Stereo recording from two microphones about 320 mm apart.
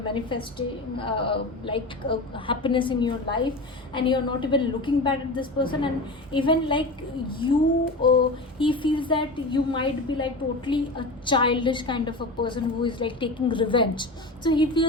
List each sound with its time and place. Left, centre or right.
0.0 s speech: centre
8.0 s speech: centre